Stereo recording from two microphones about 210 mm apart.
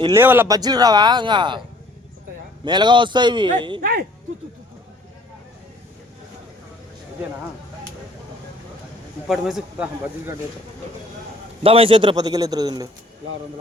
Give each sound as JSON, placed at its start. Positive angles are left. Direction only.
{"t": 0.0, "sound": "speech", "side_deg": -10}
{"t": 2.6, "sound": "speech", "side_deg": -20}
{"t": 3.8, "sound": "speech", "side_deg": -40}
{"t": 9.2, "sound": "speech", "side_deg": 0}
{"t": 11.6, "sound": "speech", "side_deg": -25}